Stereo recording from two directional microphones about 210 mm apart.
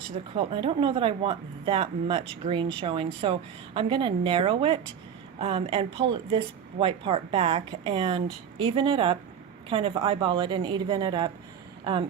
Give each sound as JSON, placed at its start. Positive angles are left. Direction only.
{"t": 0.3, "sound": "a woman's voice", "side_deg": -25}